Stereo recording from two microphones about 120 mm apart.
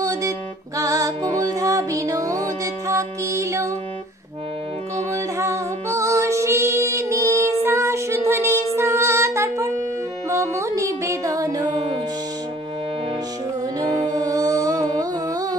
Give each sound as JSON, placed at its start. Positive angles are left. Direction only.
{"t": 0.0, "sound": "music", "side_deg": -30}
{"t": 5.1, "sound": "music", "side_deg": -25}
{"t": 13.7, "sound": "music", "side_deg": -30}